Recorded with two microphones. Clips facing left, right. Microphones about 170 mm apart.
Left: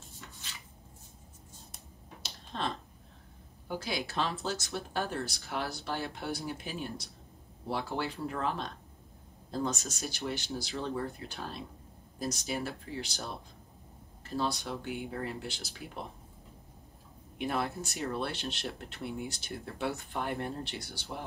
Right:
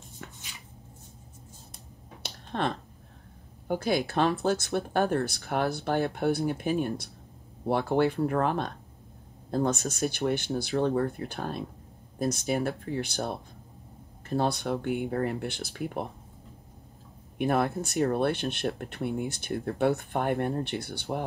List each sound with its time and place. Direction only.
2.2 s finger snapping: 60° right (ahead or behind)
3.6 s speech: 55° right (ahead or behind)
17.4 s speech: 55° right (ahead or behind)